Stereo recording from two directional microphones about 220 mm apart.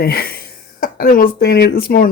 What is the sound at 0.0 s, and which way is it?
Speech, 45° left (ahead or behind).